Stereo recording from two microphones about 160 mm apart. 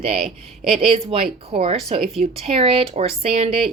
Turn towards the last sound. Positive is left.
turn(degrees=-40)  # may be behind; listen again after turning